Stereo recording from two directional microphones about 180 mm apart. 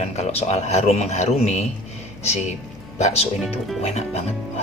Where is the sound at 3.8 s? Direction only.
35° left (ahead or behind).